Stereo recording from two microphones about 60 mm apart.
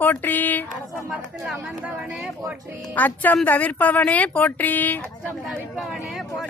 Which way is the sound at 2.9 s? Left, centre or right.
Left.